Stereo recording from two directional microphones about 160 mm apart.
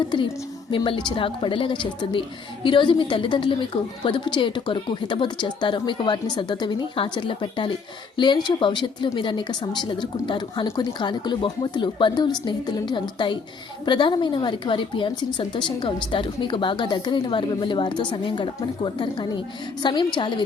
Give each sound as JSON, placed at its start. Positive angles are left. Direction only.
{"t": 0.1, "sound": "a woman's voice", "side_deg": 30}